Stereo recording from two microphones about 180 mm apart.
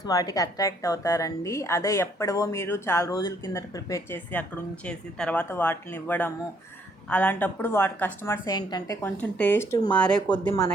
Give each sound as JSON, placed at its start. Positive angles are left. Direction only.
{"t": 0.0, "sound": "a woman's voice", "side_deg": 20}